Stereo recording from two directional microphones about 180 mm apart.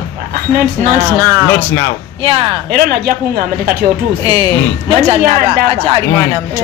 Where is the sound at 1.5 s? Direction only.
10° left (ahead or behind).